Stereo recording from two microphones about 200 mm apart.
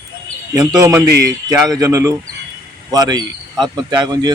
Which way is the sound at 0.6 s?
15° right (ahead or behind).